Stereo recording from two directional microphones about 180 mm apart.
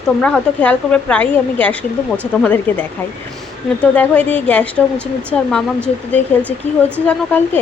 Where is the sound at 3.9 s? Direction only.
10° left (ahead or behind).